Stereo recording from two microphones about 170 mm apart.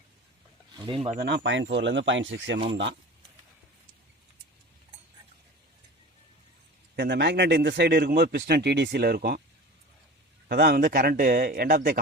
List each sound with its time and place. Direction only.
0.8 s speech: 30° right (ahead or behind)
1.2 s speech: 85° right
6.9 s a man's voice: 80° right
10.5 s speech: 70° right (ahead or behind)